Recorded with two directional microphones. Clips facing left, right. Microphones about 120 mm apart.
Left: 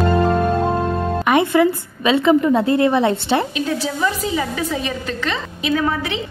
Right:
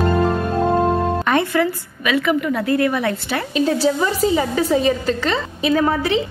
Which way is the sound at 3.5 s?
35° right (ahead or behind).